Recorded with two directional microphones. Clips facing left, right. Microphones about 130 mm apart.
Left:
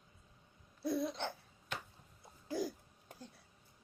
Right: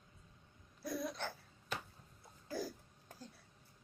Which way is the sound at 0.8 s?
25° left (ahead or behind).